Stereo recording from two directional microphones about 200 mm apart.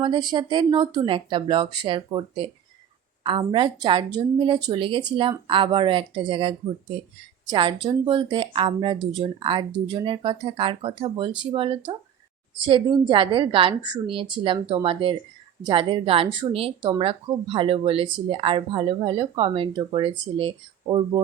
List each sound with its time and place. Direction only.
0.0 s a woman's voice: 20° right (ahead or behind)